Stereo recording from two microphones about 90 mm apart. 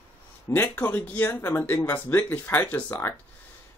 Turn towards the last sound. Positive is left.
turn(degrees=20)  # may be behind; listen again after turning